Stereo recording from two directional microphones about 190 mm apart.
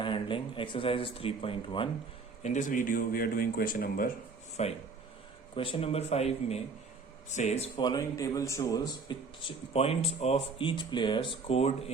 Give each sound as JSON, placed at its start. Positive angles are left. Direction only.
{"t": 0.0, "sound": "speech", "side_deg": 25}
{"t": 2.4, "sound": "speech", "side_deg": 40}
{"t": 4.6, "sound": "speech", "side_deg": 35}
{"t": 9.7, "sound": "speech", "side_deg": 30}